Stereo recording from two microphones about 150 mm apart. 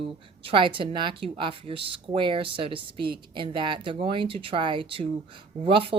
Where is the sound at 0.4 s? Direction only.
35° right (ahead or behind).